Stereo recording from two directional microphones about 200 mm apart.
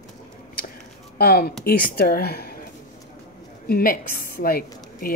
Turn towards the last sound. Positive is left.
turn(degrees=50)  # may be behind; listen again after turning